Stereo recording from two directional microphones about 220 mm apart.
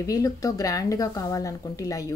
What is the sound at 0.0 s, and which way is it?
Speech, 15° left (ahead or behind).